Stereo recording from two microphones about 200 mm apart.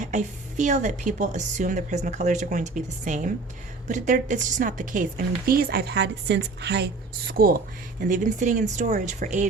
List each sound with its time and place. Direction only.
0.0 s a woman's voice: 35° right (ahead or behind)